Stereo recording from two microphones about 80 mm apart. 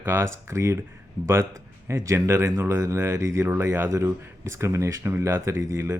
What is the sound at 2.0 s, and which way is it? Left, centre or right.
Speech, right.